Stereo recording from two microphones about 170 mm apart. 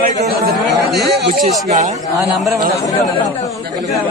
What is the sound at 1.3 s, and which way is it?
Speech, 50° right (ahead or behind).